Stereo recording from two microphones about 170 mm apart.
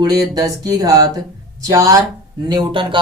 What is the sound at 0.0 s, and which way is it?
Speech, 20° right (ahead or behind).